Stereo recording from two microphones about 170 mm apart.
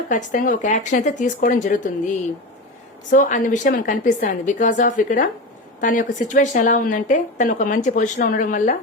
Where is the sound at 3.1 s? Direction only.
50° left (ahead or behind).